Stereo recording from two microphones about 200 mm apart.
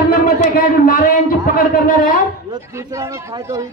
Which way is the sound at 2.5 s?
15° right (ahead or behind).